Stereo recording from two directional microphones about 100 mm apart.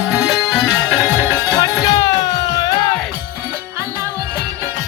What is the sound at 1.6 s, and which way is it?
Music, 35° left (ahead or behind).